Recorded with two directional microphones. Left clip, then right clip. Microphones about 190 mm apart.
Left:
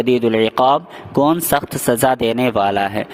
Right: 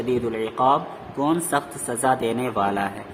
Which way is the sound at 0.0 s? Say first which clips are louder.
Left 9 dB; 55° left (ahead or behind).